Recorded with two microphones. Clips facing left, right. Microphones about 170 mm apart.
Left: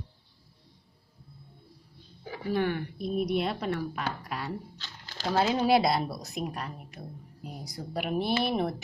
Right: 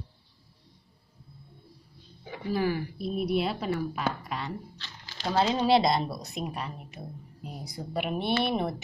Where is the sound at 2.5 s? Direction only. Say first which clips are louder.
Right 1 dB; 5° right (ahead or behind).